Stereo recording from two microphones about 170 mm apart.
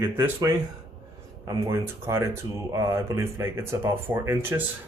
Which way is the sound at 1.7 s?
15° right (ahead or behind).